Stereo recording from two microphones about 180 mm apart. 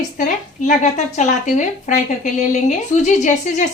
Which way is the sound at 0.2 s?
45° left (ahead or behind).